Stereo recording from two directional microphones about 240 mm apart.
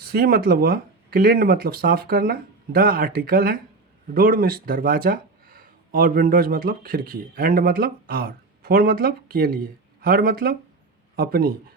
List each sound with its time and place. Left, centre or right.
0.0 s speech: right